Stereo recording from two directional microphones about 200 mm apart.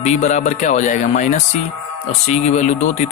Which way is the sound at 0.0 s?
35° left (ahead or behind).